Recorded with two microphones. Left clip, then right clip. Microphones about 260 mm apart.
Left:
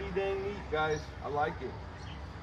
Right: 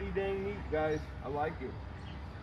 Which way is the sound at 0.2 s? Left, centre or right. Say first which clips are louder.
Left 2 dB; centre.